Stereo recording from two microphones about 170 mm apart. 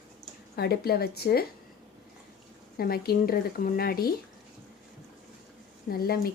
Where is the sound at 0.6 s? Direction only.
65° left (ahead or behind).